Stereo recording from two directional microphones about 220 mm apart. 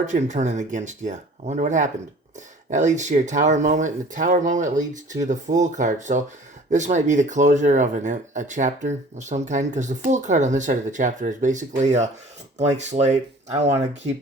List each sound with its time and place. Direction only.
0.0 s speech: 35° right (ahead or behind)